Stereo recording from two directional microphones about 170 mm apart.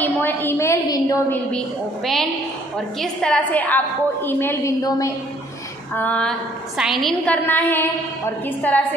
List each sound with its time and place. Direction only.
0.0 s a woman's voice: 10° left (ahead or behind)
3.0 s a woman's voice: 5° left (ahead or behind); by 5.1 s 20° left (ahead or behind)
5.9 s a woman's voice: 5° left (ahead or behind)